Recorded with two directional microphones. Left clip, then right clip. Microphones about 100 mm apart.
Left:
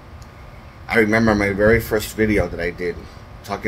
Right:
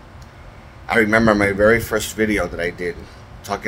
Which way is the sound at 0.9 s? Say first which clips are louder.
Right 1 dB; 20° right (ahead or behind).